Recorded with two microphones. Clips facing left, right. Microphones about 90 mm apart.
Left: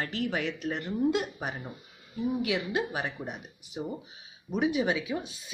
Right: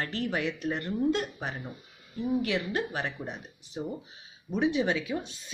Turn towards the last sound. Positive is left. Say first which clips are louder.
# even
turn(degrees=5)  # may be behind; listen again after turning